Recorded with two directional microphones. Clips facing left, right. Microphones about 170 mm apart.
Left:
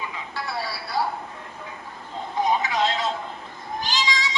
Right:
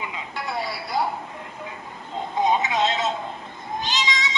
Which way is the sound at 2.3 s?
20° right (ahead or behind).